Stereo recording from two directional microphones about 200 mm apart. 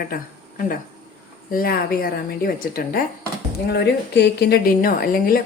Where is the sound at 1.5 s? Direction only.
45° left (ahead or behind).